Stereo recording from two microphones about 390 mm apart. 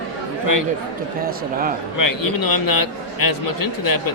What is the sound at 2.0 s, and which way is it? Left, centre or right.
A man's voice, left.